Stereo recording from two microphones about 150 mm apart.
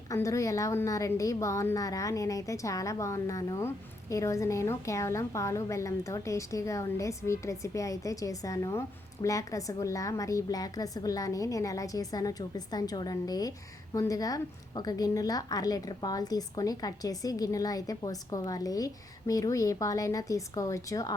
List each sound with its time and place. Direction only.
0.1 s a woman's voice: 20° left (ahead or behind)